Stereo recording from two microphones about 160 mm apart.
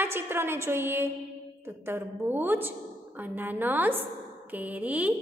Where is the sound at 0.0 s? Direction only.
15° right (ahead or behind).